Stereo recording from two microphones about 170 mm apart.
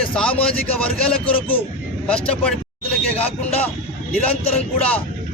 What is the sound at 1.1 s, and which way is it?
Speech, 30° left (ahead or behind).